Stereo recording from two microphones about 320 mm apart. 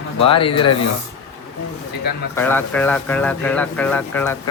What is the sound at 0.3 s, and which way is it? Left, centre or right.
Speech, centre.